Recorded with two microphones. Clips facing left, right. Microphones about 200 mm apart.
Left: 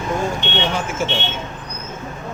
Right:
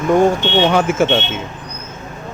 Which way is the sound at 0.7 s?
65° right (ahead or behind).